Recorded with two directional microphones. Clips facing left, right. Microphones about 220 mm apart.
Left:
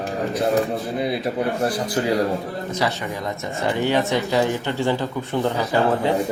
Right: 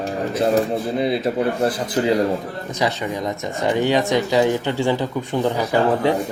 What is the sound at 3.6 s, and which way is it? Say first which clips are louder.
Speech: right 2 dB; 15° right (ahead or behind).